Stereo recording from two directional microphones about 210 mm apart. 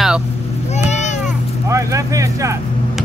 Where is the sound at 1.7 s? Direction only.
15° right (ahead or behind).